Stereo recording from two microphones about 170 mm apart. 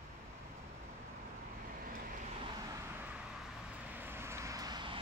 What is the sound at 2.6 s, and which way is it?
Vehicle, 15° right (ahead or behind).